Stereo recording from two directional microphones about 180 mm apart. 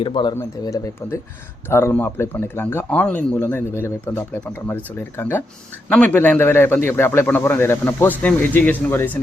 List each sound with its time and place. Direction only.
0.0 s a man's voice: 25° left (ahead or behind)